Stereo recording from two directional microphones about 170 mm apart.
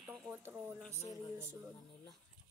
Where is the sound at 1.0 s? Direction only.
20° left (ahead or behind).